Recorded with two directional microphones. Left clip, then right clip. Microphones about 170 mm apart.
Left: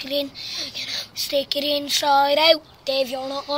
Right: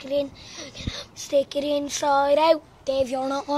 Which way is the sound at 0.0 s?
10° right (ahead or behind).